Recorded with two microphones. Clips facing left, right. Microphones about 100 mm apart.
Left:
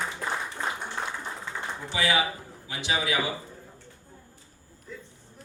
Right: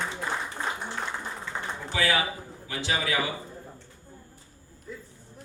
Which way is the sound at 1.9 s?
20° left (ahead or behind).